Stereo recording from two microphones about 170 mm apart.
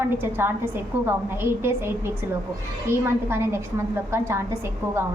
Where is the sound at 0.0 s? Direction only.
15° right (ahead or behind).